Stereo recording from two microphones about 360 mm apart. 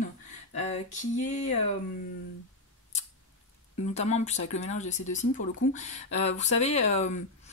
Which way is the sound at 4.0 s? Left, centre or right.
Centre.